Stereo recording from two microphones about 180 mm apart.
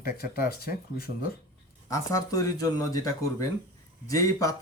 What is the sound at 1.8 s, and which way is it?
Speech, 20° left (ahead or behind).